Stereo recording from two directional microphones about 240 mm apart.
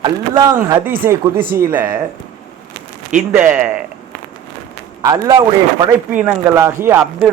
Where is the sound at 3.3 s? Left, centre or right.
Centre.